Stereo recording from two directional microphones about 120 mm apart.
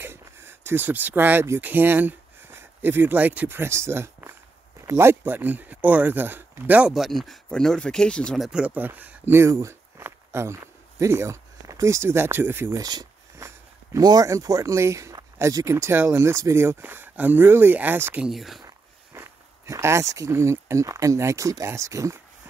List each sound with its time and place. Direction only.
0.0 s speech: 20° right (ahead or behind)
6.9 s speech: centre (ahead or behind)
8.5 s speech: 10° right (ahead or behind)
12.8 s a sound: 35° right (ahead or behind)
13.9 s speech: 30° right (ahead or behind)
18.2 s speech: centre (ahead or behind)
19.1 s speech: 20° right (ahead or behind)